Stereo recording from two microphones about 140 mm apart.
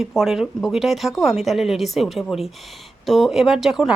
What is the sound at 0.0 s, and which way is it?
A woman's voice, centre (ahead or behind).